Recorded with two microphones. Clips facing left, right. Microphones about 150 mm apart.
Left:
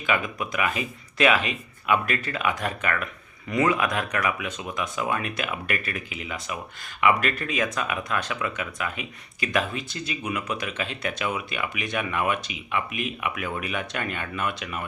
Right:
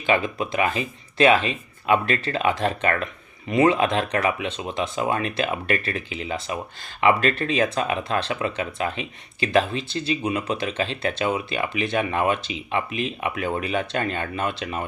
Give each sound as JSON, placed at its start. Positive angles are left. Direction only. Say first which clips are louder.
{"t": 0.0, "sound": "speech", "louder": "right 4 dB", "side_deg": -30}